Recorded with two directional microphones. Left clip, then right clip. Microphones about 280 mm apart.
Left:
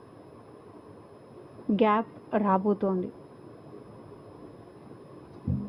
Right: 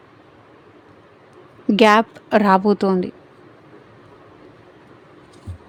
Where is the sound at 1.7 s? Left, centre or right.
Right.